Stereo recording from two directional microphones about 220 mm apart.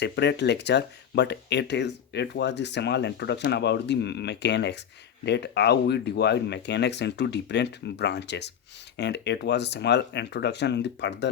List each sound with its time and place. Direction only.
0.0 s speech: 50° left (ahead or behind)